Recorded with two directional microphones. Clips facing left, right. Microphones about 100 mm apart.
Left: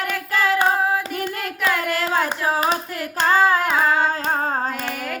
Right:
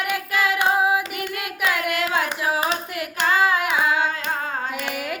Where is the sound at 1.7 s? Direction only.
35° left (ahead or behind).